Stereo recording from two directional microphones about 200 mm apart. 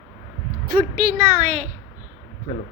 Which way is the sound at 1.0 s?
40° right (ahead or behind).